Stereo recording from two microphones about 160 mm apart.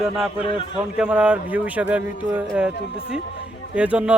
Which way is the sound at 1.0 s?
5° right (ahead or behind).